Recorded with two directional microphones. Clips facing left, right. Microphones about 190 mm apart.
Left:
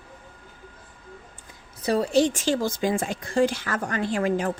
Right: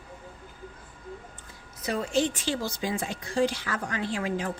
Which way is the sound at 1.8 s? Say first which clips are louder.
Left 6 dB; 35° left (ahead or behind).